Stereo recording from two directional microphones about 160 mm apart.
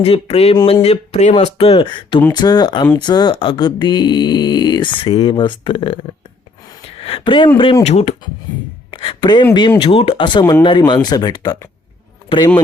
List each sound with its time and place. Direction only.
0.0 s speech: 40° left (ahead or behind)
7.9 s speech: 40° left (ahead or behind)
8.9 s speech: 30° left (ahead or behind)